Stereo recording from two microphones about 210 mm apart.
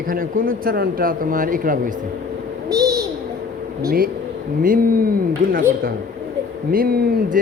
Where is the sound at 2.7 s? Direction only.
15° right (ahead or behind).